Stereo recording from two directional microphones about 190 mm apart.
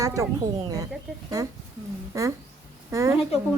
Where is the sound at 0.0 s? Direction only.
15° right (ahead or behind).